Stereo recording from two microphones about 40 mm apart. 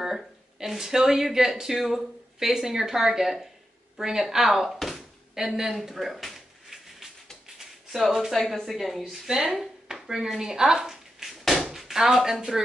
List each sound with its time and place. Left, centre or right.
0.0 s speech: centre
4.7 s thunk: centre
5.6 s speech: centre
5.9 s a sound: centre
8.4 s speech: centre
9.3 s speech: centre
9.8 s dishes: centre
10.4 s speech: centre
11.2 s a sound: centre